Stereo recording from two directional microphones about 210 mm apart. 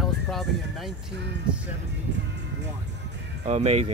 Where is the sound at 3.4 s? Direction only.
30° right (ahead or behind).